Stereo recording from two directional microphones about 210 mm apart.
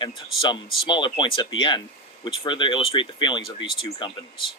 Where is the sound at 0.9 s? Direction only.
20° left (ahead or behind).